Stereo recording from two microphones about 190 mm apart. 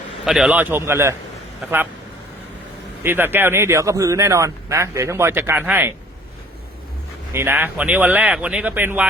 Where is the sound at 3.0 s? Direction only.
10° right (ahead or behind).